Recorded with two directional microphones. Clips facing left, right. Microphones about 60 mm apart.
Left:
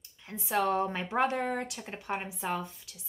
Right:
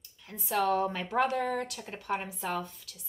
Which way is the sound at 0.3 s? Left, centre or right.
Left.